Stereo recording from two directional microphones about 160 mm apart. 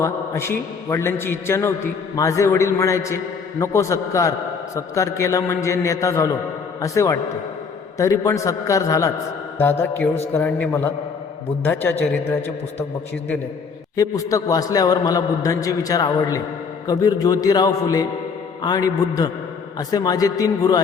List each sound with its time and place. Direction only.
0.0 s a man's voice: 15° left (ahead or behind)
13.9 s a man's voice: 20° left (ahead or behind)